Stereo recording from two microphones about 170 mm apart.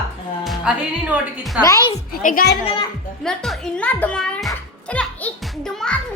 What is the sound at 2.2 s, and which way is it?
Speech, 50° left (ahead or behind).